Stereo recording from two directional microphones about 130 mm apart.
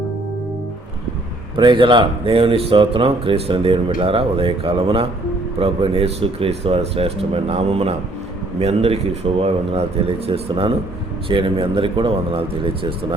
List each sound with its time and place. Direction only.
1.5 s speech: 40° right (ahead or behind)